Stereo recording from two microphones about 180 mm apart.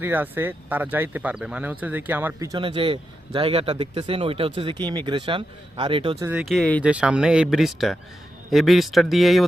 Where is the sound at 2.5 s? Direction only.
30° right (ahead or behind).